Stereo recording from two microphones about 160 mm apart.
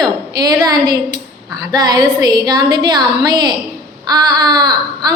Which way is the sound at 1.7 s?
25° right (ahead or behind).